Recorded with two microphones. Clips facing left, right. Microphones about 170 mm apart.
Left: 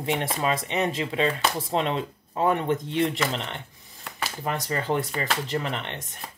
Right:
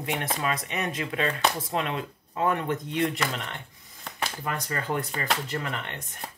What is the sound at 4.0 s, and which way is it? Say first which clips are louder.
Shuffling cards: even; 5° left (ahead or behind).